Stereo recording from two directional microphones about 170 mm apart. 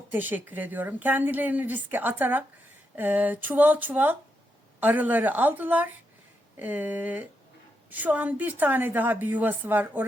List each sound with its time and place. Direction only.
0.1 s a woman's voice: 10° right (ahead or behind)